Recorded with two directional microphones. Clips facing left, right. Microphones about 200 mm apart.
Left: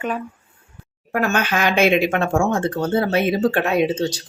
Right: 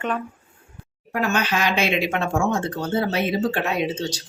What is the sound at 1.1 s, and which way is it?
Speech, 50° left (ahead or behind).